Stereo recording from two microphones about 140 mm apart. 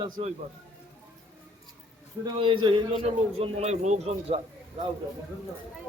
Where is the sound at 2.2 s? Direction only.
35° right (ahead or behind).